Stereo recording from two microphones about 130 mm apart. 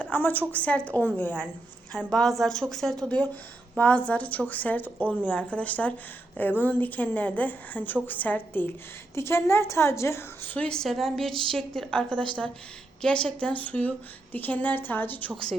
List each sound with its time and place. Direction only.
0.0 s a woman's voice: 10° left (ahead or behind)
15.3 s a woman's voice: 5° left (ahead or behind)